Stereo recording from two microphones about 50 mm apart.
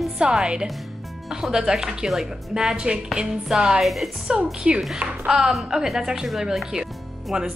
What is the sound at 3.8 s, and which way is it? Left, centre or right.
Speech, centre.